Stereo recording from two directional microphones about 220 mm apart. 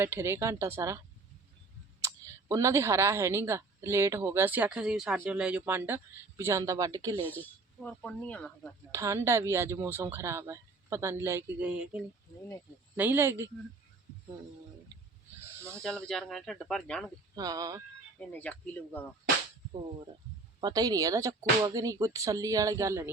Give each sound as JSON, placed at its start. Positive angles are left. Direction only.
{"t": 0.0, "sound": "speech", "side_deg": -10}
{"t": 2.0, "sound": "speech", "side_deg": -15}
{"t": 7.3, "sound": "speech", "side_deg": 5}
{"t": 8.9, "sound": "speech", "side_deg": -15}
{"t": 15.8, "sound": "speech", "side_deg": 5}
{"t": 17.3, "sound": "speech", "side_deg": -15}
{"t": 18.2, "sound": "speech", "side_deg": 5}
{"t": 20.6, "sound": "speech", "side_deg": -15}